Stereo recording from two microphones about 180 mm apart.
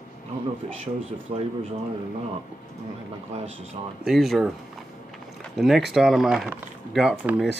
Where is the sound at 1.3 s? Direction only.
30° right (ahead or behind).